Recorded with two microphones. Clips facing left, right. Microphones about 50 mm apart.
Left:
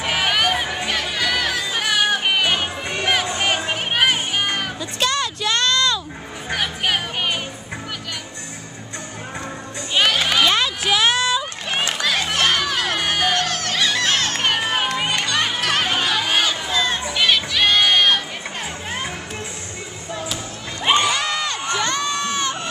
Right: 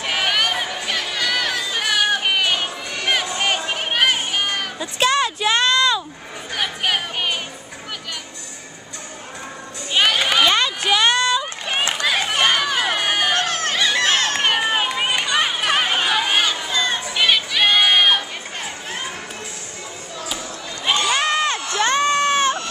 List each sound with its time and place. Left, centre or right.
0.0 s run: centre
0.8 s music: centre
4.7 s a sound: centre
6.5 s music: centre
9.9 s a sound: centre
11.9 s music: centre
14.0 s crowd: centre
20.8 s crowd: left
21.2 s crowd: right